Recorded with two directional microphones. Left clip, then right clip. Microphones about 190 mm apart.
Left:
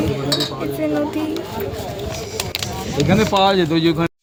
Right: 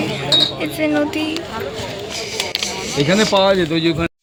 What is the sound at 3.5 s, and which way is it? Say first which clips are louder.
Speech: even; 60° left (ahead or behind).